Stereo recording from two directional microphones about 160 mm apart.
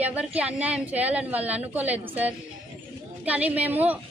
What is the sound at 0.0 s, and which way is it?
A woman's voice, 10° right (ahead or behind).